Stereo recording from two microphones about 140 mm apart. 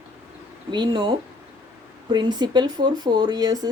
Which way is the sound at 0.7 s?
30° right (ahead or behind).